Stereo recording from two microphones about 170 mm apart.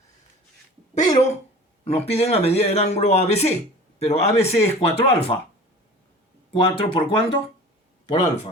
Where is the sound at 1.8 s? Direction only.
35° left (ahead or behind).